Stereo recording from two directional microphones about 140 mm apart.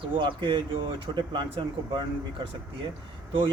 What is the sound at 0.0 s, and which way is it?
Speech, 35° right (ahead or behind).